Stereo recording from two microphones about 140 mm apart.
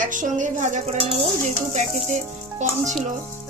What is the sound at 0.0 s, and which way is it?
Speech, 70° right (ahead or behind).